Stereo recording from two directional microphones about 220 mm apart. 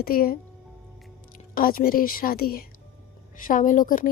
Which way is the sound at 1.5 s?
40° left (ahead or behind).